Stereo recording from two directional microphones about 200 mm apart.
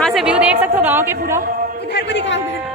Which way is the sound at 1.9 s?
65° left (ahead or behind).